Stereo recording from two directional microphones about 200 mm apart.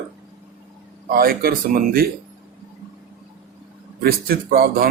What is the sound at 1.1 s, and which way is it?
Speech, 50° right (ahead or behind).